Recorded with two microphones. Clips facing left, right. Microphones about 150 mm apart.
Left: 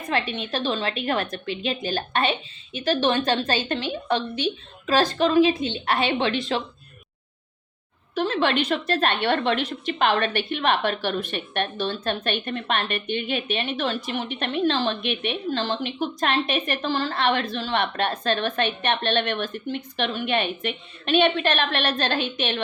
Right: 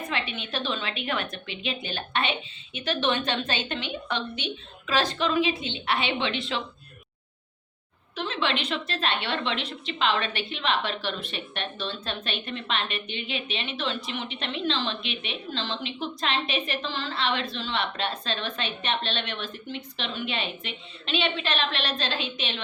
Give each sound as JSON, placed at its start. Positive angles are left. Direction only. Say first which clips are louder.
{"t": 0.1, "sound": "a woman's voice", "louder": "left 9 dB", "side_deg": 40}
{"t": 8.1, "sound": "a woman's voice", "louder": "left 6 dB", "side_deg": 45}